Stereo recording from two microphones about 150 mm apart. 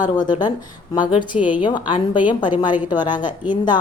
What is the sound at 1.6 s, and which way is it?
A woman's voice, 30° left (ahead or behind).